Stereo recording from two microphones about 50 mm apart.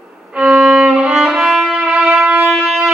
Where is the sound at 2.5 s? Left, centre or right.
Centre.